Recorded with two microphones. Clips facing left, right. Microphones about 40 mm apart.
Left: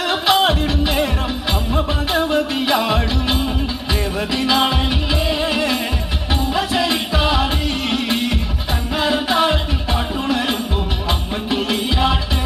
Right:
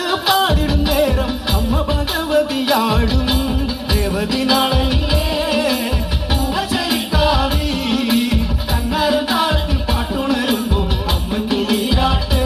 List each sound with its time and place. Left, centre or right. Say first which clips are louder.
0.1 s music: even; centre
2.3 s music: right 2 dB; centre
4.4 s music: even; centre
9.3 s music: left 1 dB; centre
11.5 s music: right 2 dB; centre